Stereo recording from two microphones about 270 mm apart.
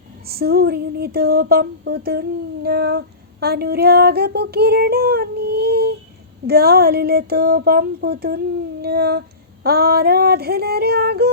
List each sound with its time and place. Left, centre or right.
0.3 s female singing: right